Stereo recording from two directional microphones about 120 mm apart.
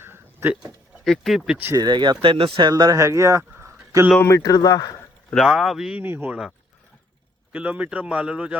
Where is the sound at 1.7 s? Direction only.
35° right (ahead or behind).